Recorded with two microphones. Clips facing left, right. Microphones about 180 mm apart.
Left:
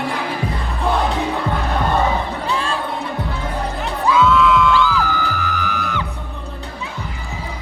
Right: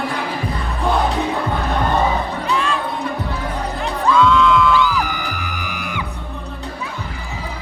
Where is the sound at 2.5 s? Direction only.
30° left (ahead or behind).